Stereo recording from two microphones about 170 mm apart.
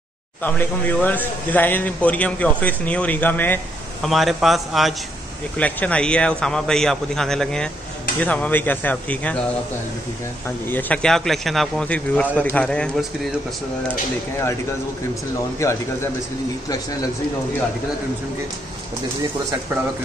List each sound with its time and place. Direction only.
0.4 s a man's voice: 10° left (ahead or behind)
4.0 s a man's voice: centre (ahead or behind)
10.7 s a man's voice: 10° left (ahead or behind)
15.6 s a man's voice: 15° left (ahead or behind)